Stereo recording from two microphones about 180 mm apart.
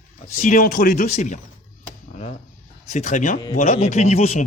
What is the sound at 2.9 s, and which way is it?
A man's voice, 40° left (ahead or behind).